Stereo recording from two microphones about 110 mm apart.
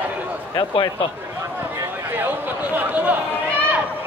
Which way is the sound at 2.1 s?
15° right (ahead or behind).